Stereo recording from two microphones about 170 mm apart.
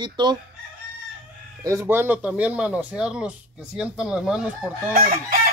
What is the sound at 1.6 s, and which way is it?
Speech, 15° right (ahead or behind).